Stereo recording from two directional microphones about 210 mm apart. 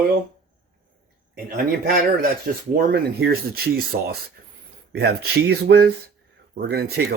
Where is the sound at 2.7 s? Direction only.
50° right (ahead or behind).